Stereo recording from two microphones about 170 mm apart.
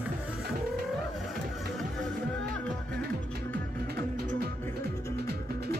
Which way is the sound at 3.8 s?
65° right (ahead or behind).